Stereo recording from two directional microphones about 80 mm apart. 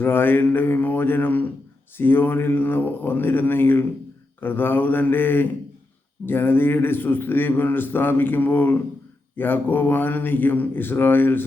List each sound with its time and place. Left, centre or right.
0.0 s speech: left